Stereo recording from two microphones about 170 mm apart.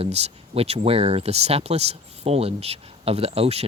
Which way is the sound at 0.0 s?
35° right (ahead or behind).